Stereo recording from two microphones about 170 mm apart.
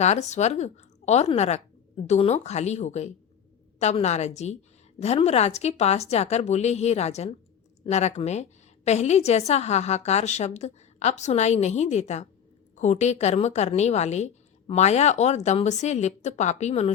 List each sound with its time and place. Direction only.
0.0 s a woman's voice: 40° left (ahead or behind)